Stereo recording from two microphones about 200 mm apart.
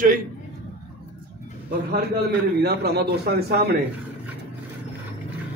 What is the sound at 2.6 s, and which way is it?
A man's voice, 55° right (ahead or behind).